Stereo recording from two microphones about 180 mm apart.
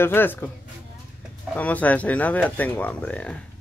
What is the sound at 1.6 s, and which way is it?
Speech, 10° left (ahead or behind).